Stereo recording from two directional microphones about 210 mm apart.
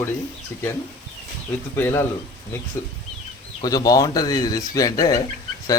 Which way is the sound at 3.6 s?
15° left (ahead or behind).